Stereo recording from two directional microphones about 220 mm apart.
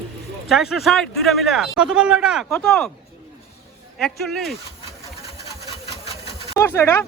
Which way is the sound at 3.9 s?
Centre (ahead or behind).